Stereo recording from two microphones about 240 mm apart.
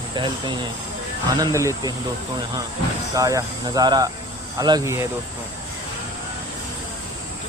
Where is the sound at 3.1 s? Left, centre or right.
Centre.